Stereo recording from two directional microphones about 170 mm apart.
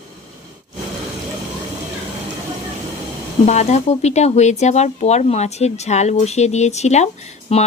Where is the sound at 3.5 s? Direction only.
40° left (ahead or behind).